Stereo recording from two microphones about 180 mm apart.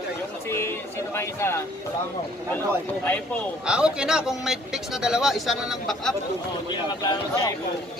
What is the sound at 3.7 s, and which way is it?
Speech, 5° right (ahead or behind).